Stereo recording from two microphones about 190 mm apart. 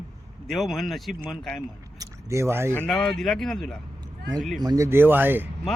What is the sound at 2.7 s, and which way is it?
Speech, 10° left (ahead or behind).